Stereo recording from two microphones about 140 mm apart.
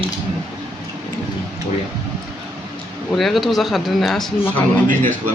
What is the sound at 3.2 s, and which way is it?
Speech, centre (ahead or behind).